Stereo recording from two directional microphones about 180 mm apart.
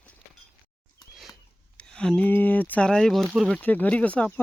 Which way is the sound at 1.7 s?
5° left (ahead or behind).